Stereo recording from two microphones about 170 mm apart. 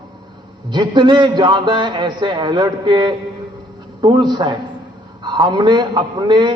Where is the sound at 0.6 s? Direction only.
25° right (ahead or behind).